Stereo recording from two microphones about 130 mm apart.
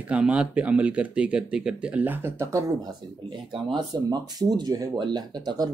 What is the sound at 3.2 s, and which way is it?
Speech, 35° right (ahead or behind).